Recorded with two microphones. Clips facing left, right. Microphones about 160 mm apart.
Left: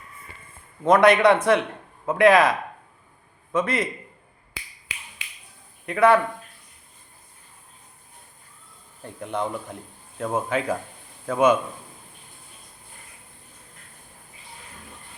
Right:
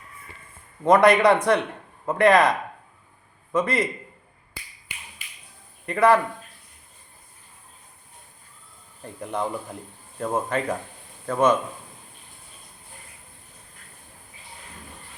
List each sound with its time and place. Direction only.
0.9 s speech: centre (ahead or behind)
4.9 s a sound: 90° left
5.8 s a man's voice: centre (ahead or behind)
9.0 s speech: centre (ahead or behind)